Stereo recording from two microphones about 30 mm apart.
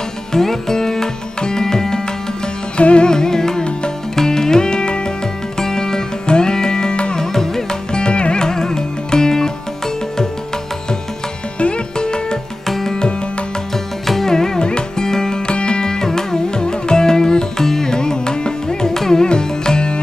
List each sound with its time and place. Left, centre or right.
0.3 s music: centre
1.4 s tabla: left
2.8 s music: left
3.1 s music: left
5.6 s music: centre
7.2 s carnatic music: centre
7.9 s music: left
8.4 s music: left
11.6 s music: left
12.6 s tabla: centre
14.0 s music: centre
14.6 s music: left
15.4 s music: left; by 19.2 s centre
19.2 s music: left